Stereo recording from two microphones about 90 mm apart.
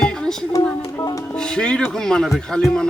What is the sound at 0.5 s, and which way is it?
Speech, 40° left (ahead or behind).